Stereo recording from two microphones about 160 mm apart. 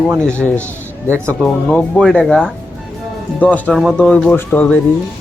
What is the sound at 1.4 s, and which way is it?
Speech, 5° left (ahead or behind).